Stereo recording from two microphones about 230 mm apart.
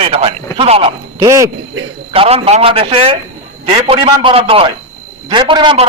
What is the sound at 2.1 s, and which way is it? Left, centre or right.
A man's voice, right.